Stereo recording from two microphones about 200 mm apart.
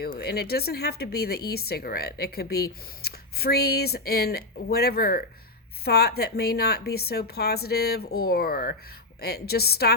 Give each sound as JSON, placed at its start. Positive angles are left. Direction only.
{"t": 0.2, "sound": "speech", "side_deg": 50}